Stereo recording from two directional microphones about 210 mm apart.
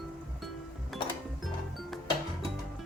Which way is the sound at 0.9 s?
Centre (ahead or behind).